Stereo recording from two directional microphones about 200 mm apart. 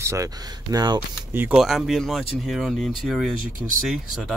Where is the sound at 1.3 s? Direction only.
5° right (ahead or behind).